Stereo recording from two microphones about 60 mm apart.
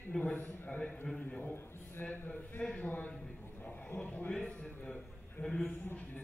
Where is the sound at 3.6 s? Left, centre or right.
Left.